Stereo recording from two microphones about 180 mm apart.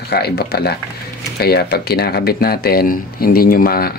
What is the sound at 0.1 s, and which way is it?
Speech, 60° left (ahead or behind).